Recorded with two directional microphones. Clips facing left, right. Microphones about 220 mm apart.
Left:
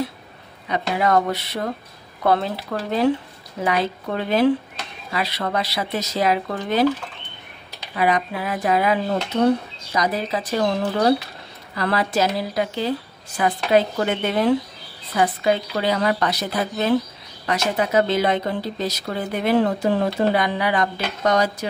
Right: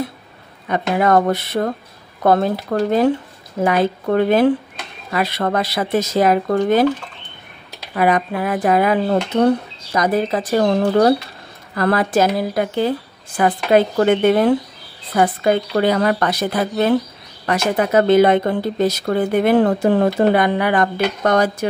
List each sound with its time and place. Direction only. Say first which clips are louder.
0.7 s speech: right 4 dB; 50° right (ahead or behind)
7.9 s speech: right 4 dB; 50° right (ahead or behind)